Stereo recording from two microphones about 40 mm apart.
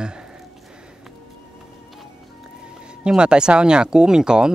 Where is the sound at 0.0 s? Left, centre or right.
Right.